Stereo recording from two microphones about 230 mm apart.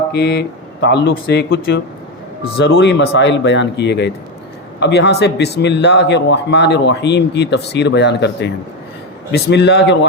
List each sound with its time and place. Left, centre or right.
0.1 s a man's voice: left